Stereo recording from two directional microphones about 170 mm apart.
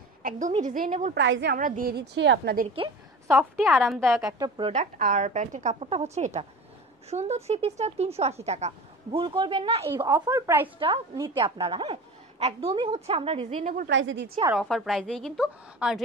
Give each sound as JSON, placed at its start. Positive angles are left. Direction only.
{"t": 0.2, "sound": "a sound", "side_deg": -50}
{"t": 0.6, "sound": "a woman's voice", "side_deg": -50}
{"t": 1.1, "sound": "a woman's voice", "side_deg": -85}
{"t": 1.6, "sound": "a woman's voice", "side_deg": -60}
{"t": 3.3, "sound": "a woman's voice", "side_deg": 0}
{"t": 4.2, "sound": "a woman's voice", "side_deg": -20}
{"t": 4.9, "sound": "a woman's voice", "side_deg": -50}
{"t": 11.1, "sound": "a woman's voice", "side_deg": -30}
{"t": 13.8, "sound": "a woman's voice", "side_deg": -90}
{"t": 14.5, "sound": "a woman's voice", "side_deg": 0}